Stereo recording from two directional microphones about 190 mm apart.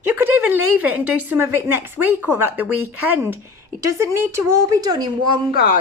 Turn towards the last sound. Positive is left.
turn(degrees=-25)  # may be behind; listen again after turning